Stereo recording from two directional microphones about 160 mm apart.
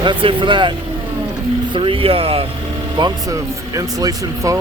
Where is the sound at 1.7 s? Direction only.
30° right (ahead or behind).